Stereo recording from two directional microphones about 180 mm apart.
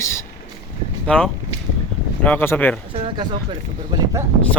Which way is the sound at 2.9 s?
30° right (ahead or behind).